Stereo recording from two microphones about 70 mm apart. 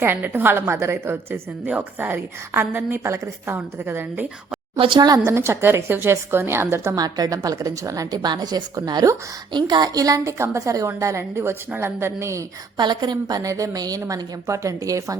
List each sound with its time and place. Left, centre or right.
0.0 s a woman's voice: right
0.6 s a woman's voice: right
4.9 s a woman's voice: right
5.2 s a woman's voice: right
6.9 s a woman's voice: right
8.7 s a woman's voice: right
9.5 s a woman's voice: right
10.3 s a woman's voice: right
12.7 s a woman's voice: right